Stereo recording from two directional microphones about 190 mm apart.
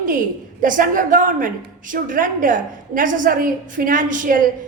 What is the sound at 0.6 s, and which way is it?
A woman's voice, 45° right (ahead or behind).